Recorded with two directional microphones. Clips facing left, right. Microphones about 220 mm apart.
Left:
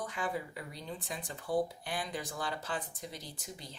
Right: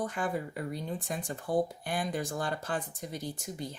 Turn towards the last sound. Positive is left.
turn(degrees=-45)  # may be behind; listen again after turning